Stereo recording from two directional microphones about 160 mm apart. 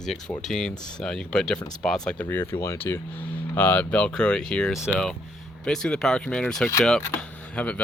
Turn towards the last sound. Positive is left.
turn(degrees=5)  # may be behind; listen again after turning